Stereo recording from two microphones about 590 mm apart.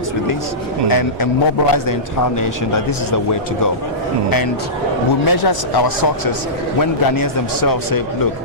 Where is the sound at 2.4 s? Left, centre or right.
Left.